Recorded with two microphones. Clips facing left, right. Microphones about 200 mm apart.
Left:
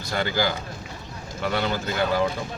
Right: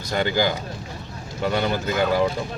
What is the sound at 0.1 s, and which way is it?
Speech, 20° right (ahead or behind).